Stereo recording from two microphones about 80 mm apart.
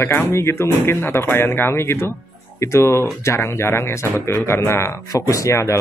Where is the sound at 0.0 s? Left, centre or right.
Left.